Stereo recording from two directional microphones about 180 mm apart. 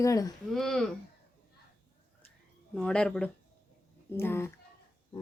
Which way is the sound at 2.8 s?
5° left (ahead or behind).